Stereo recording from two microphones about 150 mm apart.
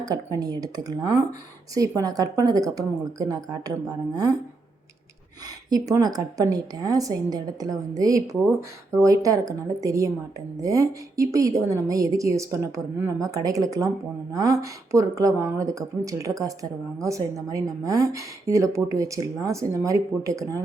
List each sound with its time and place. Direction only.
0.0 s a woman's voice: 25° right (ahead or behind)
5.6 s a woman's voice: 25° right (ahead or behind)